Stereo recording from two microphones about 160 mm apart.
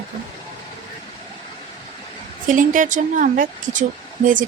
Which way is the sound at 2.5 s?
55° right (ahead or behind).